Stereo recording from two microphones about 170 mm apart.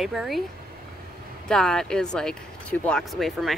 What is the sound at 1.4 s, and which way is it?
Speech, 5° left (ahead or behind).